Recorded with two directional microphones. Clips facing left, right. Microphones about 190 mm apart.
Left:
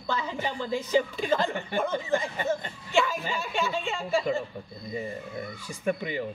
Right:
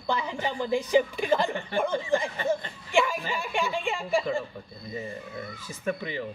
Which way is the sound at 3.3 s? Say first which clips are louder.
Even; 15° right (ahead or behind).